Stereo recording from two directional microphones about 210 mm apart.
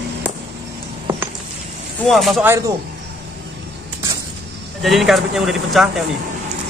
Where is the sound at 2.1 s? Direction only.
Centre (ahead or behind).